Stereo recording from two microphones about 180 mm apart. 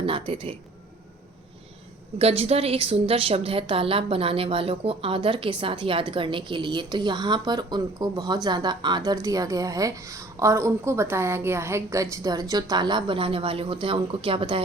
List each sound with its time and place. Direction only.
0.0 s speech: 30° right (ahead or behind)
2.1 s a woman's voice: 35° right (ahead or behind)